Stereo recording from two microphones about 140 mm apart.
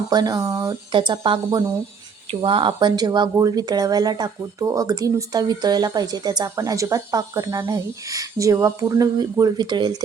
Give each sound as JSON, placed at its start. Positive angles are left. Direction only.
{"t": 0.1, "sound": "speech", "side_deg": -30}